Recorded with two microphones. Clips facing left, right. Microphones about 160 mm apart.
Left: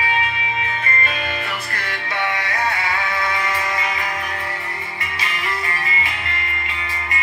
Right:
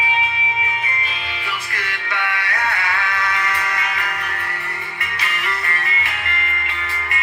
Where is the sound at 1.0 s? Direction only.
50° left (ahead or behind).